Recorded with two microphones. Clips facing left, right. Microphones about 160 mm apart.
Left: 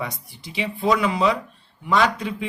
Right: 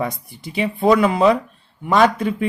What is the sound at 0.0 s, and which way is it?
A man's voice, 50° right (ahead or behind).